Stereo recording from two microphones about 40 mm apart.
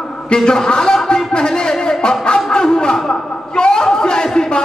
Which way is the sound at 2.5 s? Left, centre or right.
Left.